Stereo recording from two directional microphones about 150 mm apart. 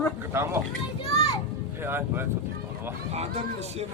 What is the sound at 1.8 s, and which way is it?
Speech, 15° right (ahead or behind).